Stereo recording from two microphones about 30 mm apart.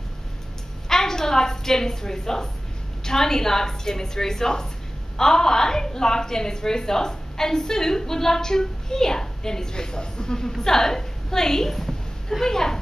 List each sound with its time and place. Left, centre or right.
0.8 s a woman's voice: centre